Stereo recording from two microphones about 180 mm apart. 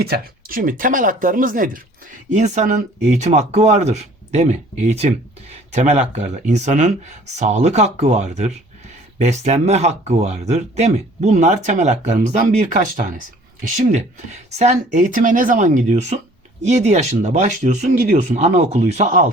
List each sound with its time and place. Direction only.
0.0 s speech: 55° right (ahead or behind); by 19.2 s 40° right (ahead or behind)